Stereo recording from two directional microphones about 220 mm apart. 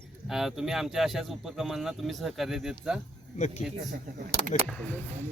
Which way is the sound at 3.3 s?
35° left (ahead or behind).